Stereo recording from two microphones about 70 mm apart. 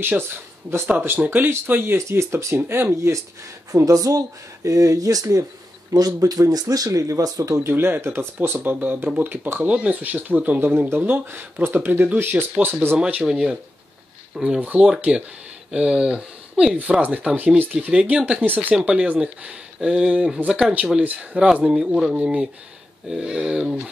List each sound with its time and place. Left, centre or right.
1.0 s speech: right
2.0 s speech: right
3.7 s speech: right
7.6 s speech: right
12.9 s speech: centre
14.6 s speech: right